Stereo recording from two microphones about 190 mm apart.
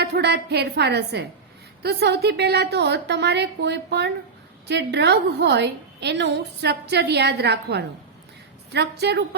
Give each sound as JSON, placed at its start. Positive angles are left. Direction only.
{"t": 0.0, "sound": "a woman's voice", "side_deg": -60}